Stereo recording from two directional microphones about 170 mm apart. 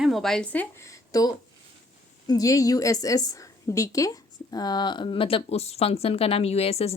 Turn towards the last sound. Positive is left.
turn(degrees=35)  # may be behind; listen again after turning